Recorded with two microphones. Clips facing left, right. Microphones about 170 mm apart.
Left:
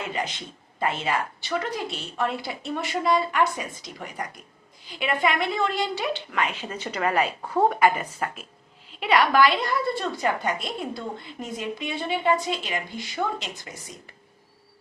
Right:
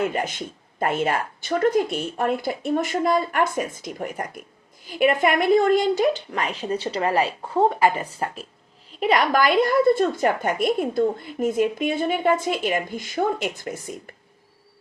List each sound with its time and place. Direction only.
0.0 s a woman's voice: 50° right (ahead or behind)